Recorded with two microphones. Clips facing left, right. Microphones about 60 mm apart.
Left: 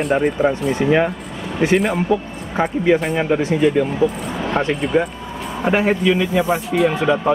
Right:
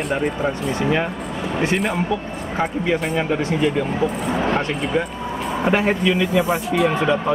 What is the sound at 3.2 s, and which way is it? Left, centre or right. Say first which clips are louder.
Speech: left 3 dB; centre.